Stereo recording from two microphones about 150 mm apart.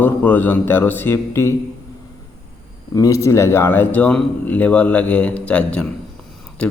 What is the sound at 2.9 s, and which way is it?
Speech, 20° left (ahead or behind).